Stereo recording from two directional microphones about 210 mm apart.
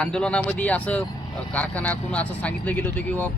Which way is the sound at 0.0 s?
5° left (ahead or behind).